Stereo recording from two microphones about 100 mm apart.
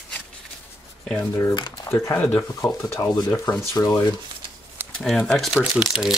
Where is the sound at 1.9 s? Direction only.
25° left (ahead or behind).